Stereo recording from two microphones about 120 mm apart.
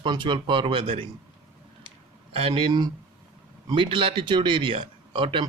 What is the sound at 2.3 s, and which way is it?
Speech, 50° right (ahead or behind).